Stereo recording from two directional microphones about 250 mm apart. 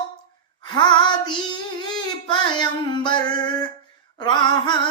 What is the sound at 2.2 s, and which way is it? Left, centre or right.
Music, centre.